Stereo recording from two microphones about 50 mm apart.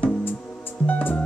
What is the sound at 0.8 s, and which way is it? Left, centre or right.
Music, left.